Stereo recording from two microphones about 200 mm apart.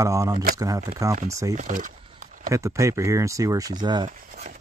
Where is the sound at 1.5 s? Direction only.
40° right (ahead or behind).